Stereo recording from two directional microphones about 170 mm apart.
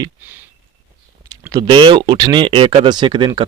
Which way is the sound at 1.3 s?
20° right (ahead or behind).